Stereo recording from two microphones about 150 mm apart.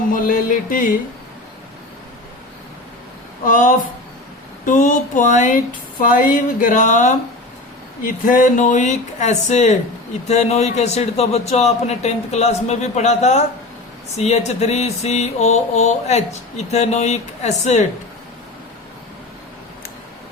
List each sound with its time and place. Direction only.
0.1 s speech: 65° left (ahead or behind)
3.4 s speech: 60° left (ahead or behind)
10.2 s a sound: 45° left (ahead or behind)